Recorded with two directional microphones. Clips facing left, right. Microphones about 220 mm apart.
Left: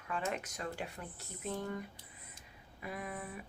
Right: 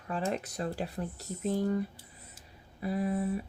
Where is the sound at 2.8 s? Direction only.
35° right (ahead or behind).